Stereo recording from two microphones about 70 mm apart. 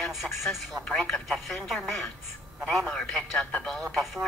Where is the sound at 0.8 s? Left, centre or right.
Centre.